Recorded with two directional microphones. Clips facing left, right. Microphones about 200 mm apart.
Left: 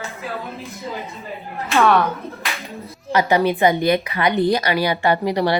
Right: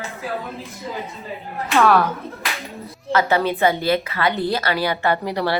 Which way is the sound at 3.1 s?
15° left (ahead or behind).